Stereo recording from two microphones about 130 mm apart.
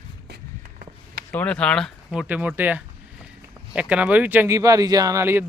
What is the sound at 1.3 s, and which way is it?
Speech, 10° left (ahead or behind).